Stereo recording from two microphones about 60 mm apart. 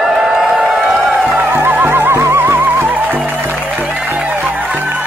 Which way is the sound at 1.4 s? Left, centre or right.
Right.